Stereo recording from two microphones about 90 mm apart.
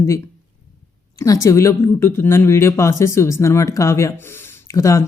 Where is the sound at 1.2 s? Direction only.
35° left (ahead or behind).